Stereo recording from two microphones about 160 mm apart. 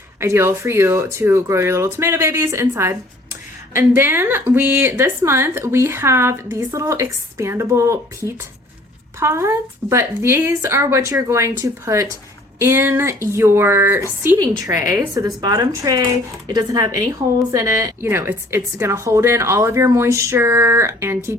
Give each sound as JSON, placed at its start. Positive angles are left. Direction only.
{"t": 0.2, "sound": "a woman's voice", "side_deg": -15}
{"t": 9.2, "sound": "a woman's voice", "side_deg": -15}